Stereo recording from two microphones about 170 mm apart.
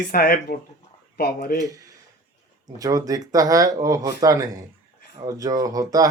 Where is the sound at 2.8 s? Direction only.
20° right (ahead or behind).